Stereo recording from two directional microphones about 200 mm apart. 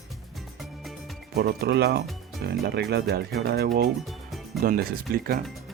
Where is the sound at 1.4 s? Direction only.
50° right (ahead or behind).